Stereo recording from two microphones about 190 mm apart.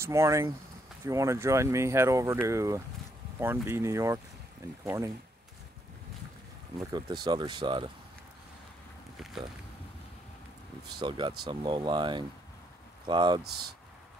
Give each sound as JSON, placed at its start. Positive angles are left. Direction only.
{"t": 0.0, "sound": "speech", "side_deg": -15}
{"t": 6.9, "sound": "speech", "side_deg": -20}
{"t": 11.0, "sound": "speech", "side_deg": -25}
{"t": 13.4, "sound": "speech", "side_deg": -55}